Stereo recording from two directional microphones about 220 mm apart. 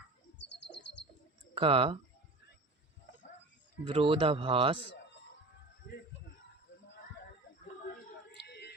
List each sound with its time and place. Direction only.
0.3 s bird: 50° left (ahead or behind)
1.5 s speech: 25° right (ahead or behind)
3.8 s speech: 25° right (ahead or behind)
8.3 s a sound: 50° left (ahead or behind)